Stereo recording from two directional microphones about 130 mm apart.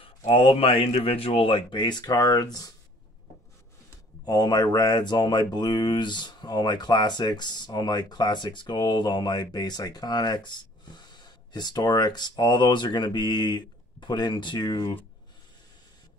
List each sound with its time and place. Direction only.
0.2 s speech: 45° left (ahead or behind); by 2.7 s 30° left (ahead or behind)
4.2 s speech: 30° left (ahead or behind)